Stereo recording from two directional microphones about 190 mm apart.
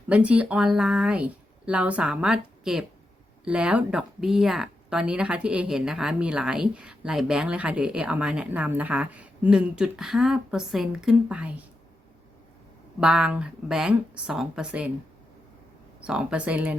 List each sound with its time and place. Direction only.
0.1 s speech: 5° right (ahead or behind)
13.0 s speech: 5° right (ahead or behind)
16.0 s speech: 5° right (ahead or behind)